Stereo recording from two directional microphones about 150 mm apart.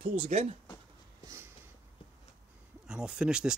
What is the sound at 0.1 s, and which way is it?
Speech, 45° right (ahead or behind).